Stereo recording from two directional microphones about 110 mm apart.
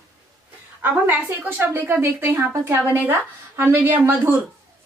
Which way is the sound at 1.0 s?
15° right (ahead or behind).